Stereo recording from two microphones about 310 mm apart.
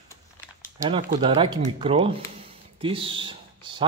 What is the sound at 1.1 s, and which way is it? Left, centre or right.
Speech, centre.